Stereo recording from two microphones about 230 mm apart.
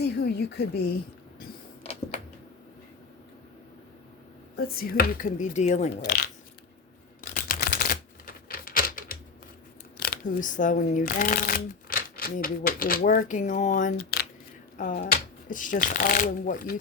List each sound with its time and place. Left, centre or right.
0.0 s a woman's voice: left
1.8 s a sound: left
4.5 s speech: left
6.0 s a woman's voice: left
7.3 s typewriter: left
10.0 s speech: left